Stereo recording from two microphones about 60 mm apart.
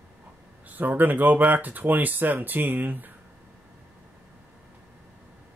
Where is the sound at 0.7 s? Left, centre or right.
Right.